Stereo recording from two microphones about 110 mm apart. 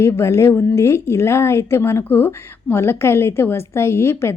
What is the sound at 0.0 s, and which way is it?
Speech, 25° left (ahead or behind).